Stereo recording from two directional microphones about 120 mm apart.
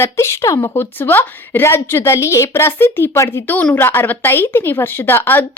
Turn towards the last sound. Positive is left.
turn(degrees=15)  # may be behind; listen again after turning